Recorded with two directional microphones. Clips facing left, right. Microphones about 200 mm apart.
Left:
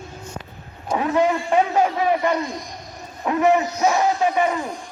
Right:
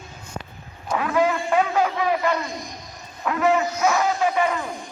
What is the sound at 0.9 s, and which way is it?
A man's voice, 25° left (ahead or behind).